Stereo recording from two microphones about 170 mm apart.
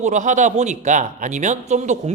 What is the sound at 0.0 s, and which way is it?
Speech, 45° right (ahead or behind).